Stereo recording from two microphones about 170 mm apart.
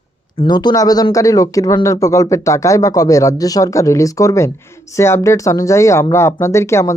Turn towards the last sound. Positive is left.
turn(degrees=15)  # may be behind; listen again after turning